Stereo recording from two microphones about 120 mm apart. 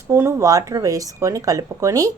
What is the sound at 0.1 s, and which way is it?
A woman's voice, 25° right (ahead or behind).